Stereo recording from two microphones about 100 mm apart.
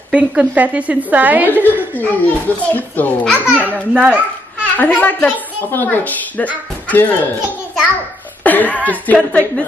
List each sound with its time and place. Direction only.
0.1 s a woman's voice: 15° right (ahead or behind)
2.0 s speech: 15° left (ahead or behind)
3.3 s a child's voice: 15° right (ahead or behind)
4.6 s a woman's voice: 15° left (ahead or behind)
8.5 s speech: 15° left (ahead or behind)